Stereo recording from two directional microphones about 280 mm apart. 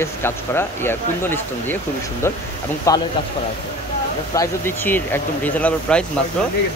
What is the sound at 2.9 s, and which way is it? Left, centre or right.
Speech, centre.